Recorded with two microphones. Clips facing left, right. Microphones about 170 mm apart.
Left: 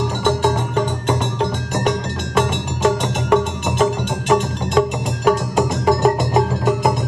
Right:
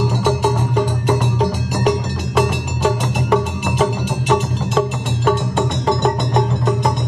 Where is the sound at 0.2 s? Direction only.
10° right (ahead or behind).